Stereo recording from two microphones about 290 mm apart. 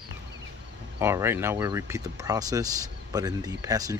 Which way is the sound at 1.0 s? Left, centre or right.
Centre.